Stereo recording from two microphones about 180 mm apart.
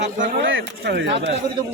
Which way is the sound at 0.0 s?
45° right (ahead or behind).